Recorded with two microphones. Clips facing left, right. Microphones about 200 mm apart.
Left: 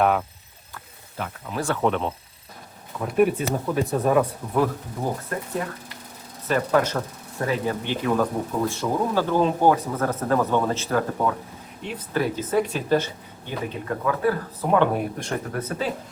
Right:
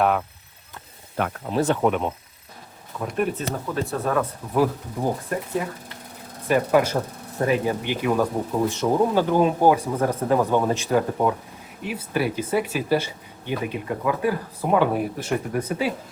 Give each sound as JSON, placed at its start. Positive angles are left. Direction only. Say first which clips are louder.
{"t": 0.0, "sound": "speech", "louder": "even", "side_deg": 0}
{"t": 1.5, "sound": "speech", "louder": "right 4 dB", "side_deg": -25}
{"t": 1.8, "sound": "speech", "louder": "right 1 dB", "side_deg": -10}
{"t": 3.0, "sound": "speech", "louder": "left 5 dB", "side_deg": 0}
{"t": 3.3, "sound": "speech", "louder": "left 3 dB", "side_deg": 15}
{"t": 6.5, "sound": "speech", "louder": "right 2 dB", "side_deg": -10}